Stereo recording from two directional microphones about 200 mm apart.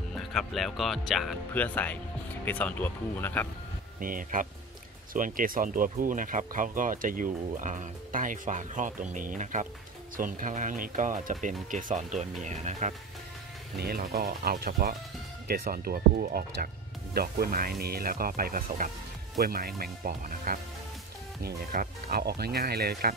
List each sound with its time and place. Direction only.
0.2 s speech: centre (ahead or behind)
4.0 s speech: 45° right (ahead or behind)
13.7 s speech: 50° right (ahead or behind)